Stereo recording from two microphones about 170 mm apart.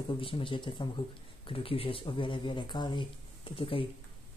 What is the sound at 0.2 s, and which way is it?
Speech, 30° left (ahead or behind).